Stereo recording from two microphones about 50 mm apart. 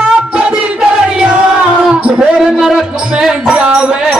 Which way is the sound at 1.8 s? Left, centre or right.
Centre.